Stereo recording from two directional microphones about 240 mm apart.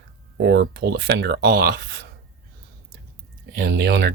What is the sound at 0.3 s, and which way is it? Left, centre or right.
Speech, right.